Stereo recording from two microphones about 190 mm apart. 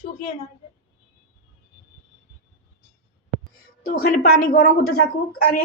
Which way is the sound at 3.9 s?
50° left (ahead or behind).